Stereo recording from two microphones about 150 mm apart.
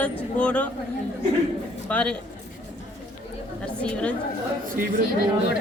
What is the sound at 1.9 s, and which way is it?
Speech, 10° left (ahead or behind).